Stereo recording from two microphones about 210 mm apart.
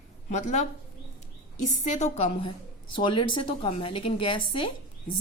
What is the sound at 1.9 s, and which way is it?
A woman's voice, 30° left (ahead or behind).